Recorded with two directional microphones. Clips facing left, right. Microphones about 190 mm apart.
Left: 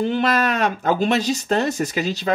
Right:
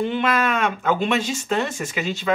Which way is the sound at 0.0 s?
40° left (ahead or behind).